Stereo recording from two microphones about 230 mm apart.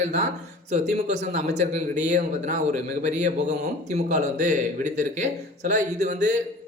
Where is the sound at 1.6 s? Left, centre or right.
Right.